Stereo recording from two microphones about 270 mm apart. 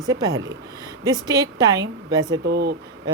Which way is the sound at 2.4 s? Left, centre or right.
Right.